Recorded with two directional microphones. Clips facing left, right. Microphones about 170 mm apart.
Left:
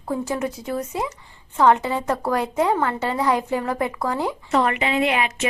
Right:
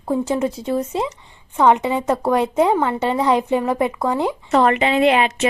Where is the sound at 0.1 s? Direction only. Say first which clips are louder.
Right 5 dB; 25° right (ahead or behind).